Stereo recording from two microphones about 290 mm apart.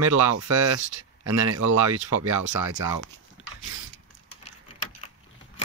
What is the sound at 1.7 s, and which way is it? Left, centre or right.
Speech, right.